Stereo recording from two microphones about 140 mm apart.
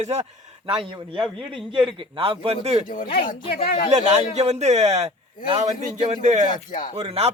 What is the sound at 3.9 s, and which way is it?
A man's voice, 55° right (ahead or behind).